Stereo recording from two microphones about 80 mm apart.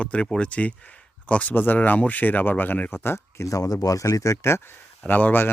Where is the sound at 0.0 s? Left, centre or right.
Centre.